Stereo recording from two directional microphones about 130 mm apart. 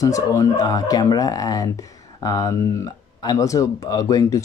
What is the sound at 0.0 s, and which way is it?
Speech, 25° left (ahead or behind).